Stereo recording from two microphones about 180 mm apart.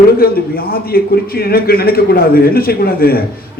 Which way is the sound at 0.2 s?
55° left (ahead or behind).